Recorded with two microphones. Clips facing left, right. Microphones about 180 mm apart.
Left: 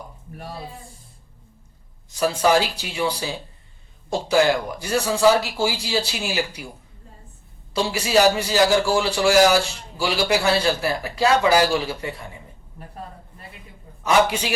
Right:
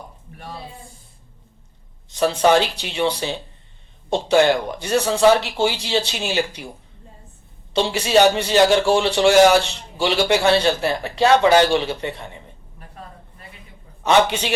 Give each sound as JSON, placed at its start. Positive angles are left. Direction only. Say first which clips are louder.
{"t": 2.1, "sound": "a man's voice", "louder": "right 3 dB", "side_deg": -25}
{"t": 7.7, "sound": "a man's voice", "louder": "right 3 dB", "side_deg": -25}
{"t": 14.0, "sound": "a man's voice", "louder": "right 2 dB", "side_deg": -25}